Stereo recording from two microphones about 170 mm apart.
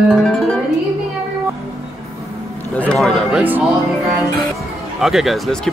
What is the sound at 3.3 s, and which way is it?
Speech, 10° right (ahead or behind).